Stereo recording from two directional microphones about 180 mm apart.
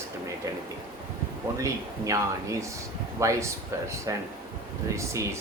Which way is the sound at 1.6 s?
15° right (ahead or behind).